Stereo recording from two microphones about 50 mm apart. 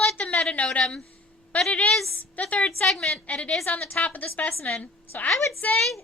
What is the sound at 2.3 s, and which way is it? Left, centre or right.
Speech, left.